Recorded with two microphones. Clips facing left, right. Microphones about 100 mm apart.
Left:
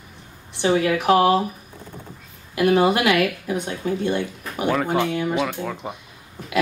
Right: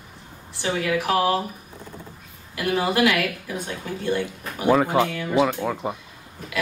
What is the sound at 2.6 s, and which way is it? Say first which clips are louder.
Speech: left 4 dB; 20° left (ahead or behind).